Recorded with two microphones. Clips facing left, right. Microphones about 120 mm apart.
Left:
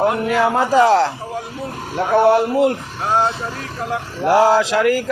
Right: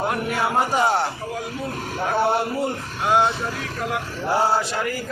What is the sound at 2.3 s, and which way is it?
Speech, 90° left.